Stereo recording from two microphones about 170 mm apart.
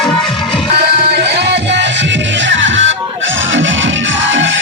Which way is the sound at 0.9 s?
85° right.